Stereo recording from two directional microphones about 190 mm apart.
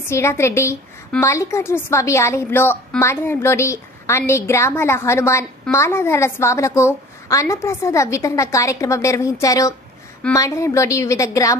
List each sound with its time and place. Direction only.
0.0 s a woman's voice: 15° left (ahead or behind)